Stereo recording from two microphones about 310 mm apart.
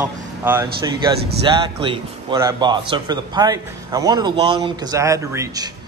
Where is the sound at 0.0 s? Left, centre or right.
Centre.